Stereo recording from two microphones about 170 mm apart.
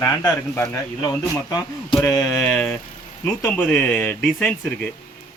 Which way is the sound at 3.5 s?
10° left (ahead or behind).